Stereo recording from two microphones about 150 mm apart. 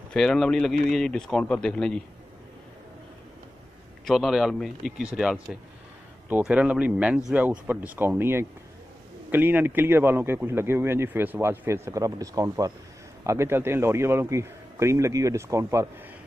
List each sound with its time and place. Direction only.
0.1 s speech: 5° left (ahead or behind)
4.0 s a man's voice: centre (ahead or behind); by 15.9 s 20° right (ahead or behind)